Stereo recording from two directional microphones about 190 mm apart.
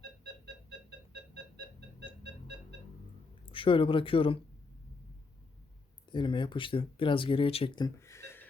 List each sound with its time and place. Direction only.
3.4 s speech: 25° left (ahead or behind)
6.1 s speech: 25° left (ahead or behind)